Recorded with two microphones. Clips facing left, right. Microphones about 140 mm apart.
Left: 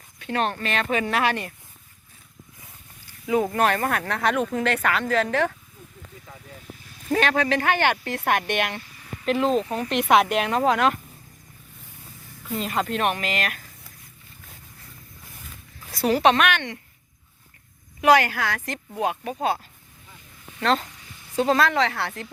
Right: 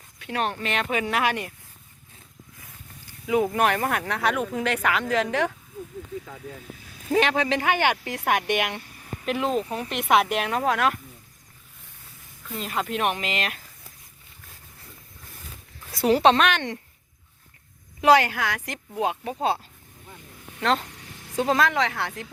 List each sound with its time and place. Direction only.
0.2 s speech: 10° right (ahead or behind)
3.2 s speech: 5° right (ahead or behind)
7.1 s speech: 15° right (ahead or behind)
8.8 s a sound: 50° right (ahead or behind)
9.2 s a woman's voice: 10° right (ahead or behind)
12.5 s speech: centre (ahead or behind); by 13.6 s 20° right (ahead or behind)
16.0 s speech: 25° right (ahead or behind)
18.0 s speech: 25° right (ahead or behind)
20.6 s speech: 15° right (ahead or behind)
20.9 s a sound: 70° right (ahead or behind)
21.3 s speech: 15° right (ahead or behind)